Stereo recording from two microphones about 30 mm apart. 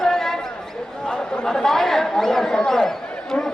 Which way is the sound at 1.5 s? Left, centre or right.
Centre.